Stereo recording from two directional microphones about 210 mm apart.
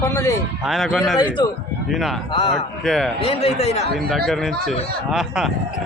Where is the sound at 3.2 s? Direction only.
30° left (ahead or behind).